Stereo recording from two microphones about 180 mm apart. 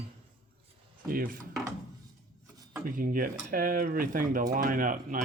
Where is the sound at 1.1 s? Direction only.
55° right (ahead or behind).